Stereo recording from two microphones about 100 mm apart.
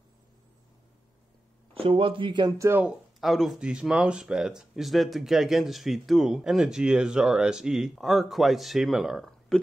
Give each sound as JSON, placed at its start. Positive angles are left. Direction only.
{"t": 1.7, "sound": "speech", "side_deg": -65}
{"t": 3.2, "sound": "speech", "side_deg": 0}